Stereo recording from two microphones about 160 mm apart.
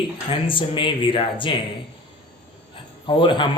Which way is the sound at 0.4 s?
30° left (ahead or behind).